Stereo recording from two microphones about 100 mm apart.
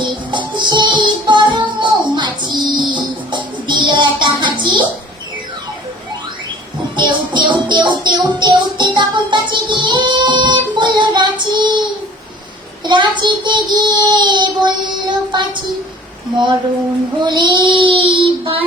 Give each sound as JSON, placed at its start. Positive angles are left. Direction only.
{"t": 0.0, "sound": "music", "side_deg": -50}
{"t": 6.9, "sound": "music", "side_deg": -50}
{"t": 12.8, "sound": "child singing", "side_deg": -50}
{"t": 17.2, "sound": "child singing", "side_deg": -50}